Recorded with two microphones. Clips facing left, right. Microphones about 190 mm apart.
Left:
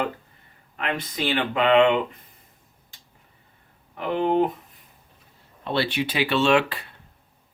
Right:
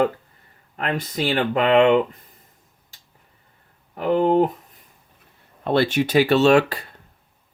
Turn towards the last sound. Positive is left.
turn(degrees=-40)  # may be behind; listen again after turning